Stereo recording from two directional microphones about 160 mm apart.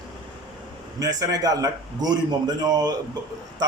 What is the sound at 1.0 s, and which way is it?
A man's voice, 25° right (ahead or behind).